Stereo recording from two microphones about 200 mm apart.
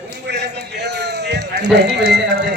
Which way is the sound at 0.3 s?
60° right (ahead or behind).